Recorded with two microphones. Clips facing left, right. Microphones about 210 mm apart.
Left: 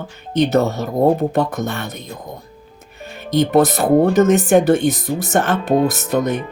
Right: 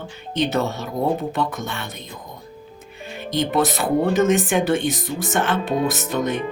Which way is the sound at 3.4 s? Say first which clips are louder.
Left 6 dB; 40° left (ahead or behind).